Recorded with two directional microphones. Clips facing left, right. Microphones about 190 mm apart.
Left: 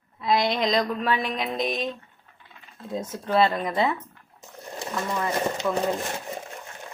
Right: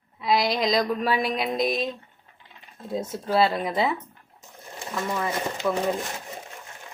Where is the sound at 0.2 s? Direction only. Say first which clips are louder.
Even; centre (ahead or behind).